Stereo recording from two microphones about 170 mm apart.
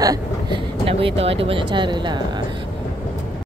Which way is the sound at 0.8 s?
35° right (ahead or behind).